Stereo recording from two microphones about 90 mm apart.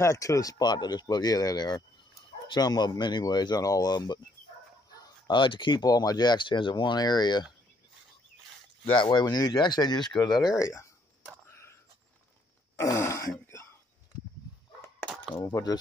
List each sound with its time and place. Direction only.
0.0 s speech: 35° left (ahead or behind)
4.9 s dog: 45° left (ahead or behind)
5.3 s speech: 65° left (ahead or behind)
8.9 s speech: 60° left (ahead or behind)
10.5 s speech: 35° left (ahead or behind)
11.4 s a sound: 30° left (ahead or behind)
12.7 s throat clearing: 35° left (ahead or behind)
15.5 s speech: 45° left (ahead or behind)